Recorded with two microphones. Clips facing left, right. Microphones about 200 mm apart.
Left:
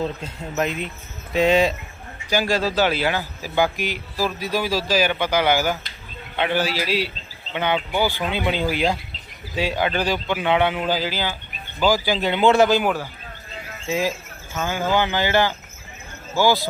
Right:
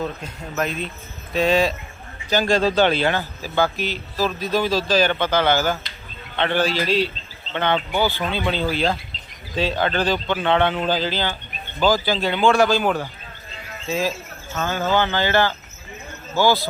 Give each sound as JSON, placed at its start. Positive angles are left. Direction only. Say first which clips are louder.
{"t": 0.0, "sound": "speech", "louder": "left 1 dB", "side_deg": 20}
{"t": 2.3, "sound": "a man's voice", "louder": "right 3 dB", "side_deg": 10}